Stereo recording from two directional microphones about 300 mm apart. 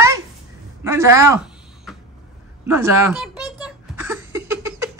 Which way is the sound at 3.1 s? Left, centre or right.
Centre.